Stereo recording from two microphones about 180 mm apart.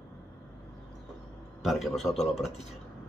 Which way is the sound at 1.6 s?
Centre (ahead or behind).